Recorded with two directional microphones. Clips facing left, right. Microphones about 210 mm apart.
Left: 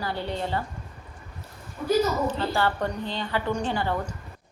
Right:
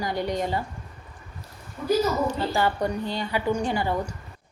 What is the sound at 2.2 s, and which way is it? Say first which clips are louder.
A woman's voice: right 1 dB; 10° right (ahead or behind).